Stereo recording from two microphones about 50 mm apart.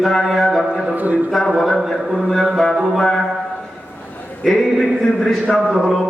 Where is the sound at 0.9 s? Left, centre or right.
Right.